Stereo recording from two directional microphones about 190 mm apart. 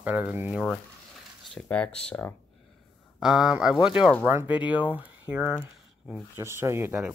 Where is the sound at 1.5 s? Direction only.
5° left (ahead or behind).